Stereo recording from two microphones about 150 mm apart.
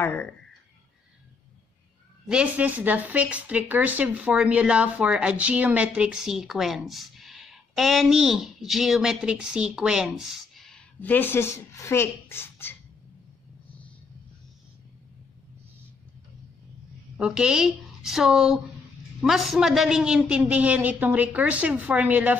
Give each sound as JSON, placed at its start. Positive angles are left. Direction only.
{"t": 0.0, "sound": "speech", "side_deg": 10}
{"t": 2.2, "sound": "speech", "side_deg": -5}
{"t": 17.2, "sound": "a woman's voice", "side_deg": -5}